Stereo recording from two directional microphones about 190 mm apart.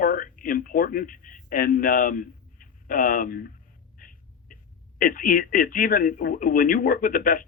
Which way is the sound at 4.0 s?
45° left (ahead or behind).